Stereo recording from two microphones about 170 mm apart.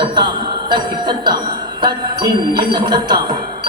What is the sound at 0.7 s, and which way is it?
Music, 25° right (ahead or behind).